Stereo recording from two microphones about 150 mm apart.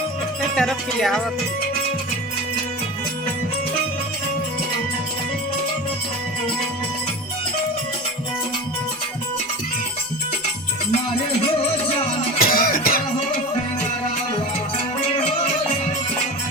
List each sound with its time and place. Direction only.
0.5 s music: 5° left (ahead or behind)
12.4 s music: 75° left (ahead or behind)